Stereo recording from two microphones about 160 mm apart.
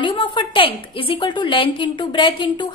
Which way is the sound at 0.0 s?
30° left (ahead or behind).